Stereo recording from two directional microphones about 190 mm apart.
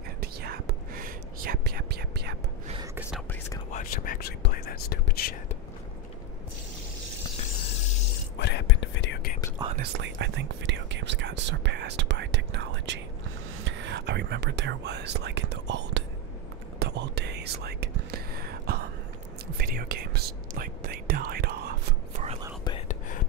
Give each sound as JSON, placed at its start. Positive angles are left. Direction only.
{"t": 0.2, "sound": "whispering", "side_deg": -55}
{"t": 3.0, "sound": "speech", "side_deg": -5}
{"t": 3.3, "sound": "speech", "side_deg": 15}
{"t": 3.7, "sound": "speech", "side_deg": 45}
{"t": 8.4, "sound": "whispering", "side_deg": 60}
{"t": 9.8, "sound": "speech", "side_deg": -65}
{"t": 16.8, "sound": "whispering", "side_deg": -60}
{"t": 19.6, "sound": "speech", "side_deg": -50}
{"t": 22.7, "sound": "whispering", "side_deg": 35}